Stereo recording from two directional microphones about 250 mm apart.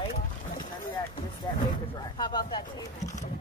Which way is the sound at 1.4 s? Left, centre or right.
Centre.